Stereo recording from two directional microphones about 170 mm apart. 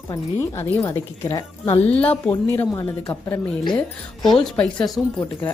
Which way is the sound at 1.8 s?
10° left (ahead or behind).